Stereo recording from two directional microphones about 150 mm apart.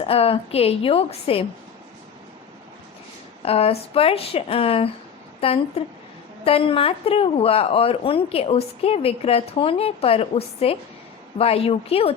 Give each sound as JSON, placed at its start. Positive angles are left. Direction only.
{"t": 0.0, "sound": "a woman's voice", "side_deg": 40}
{"t": 3.4, "sound": "a woman's voice", "side_deg": 40}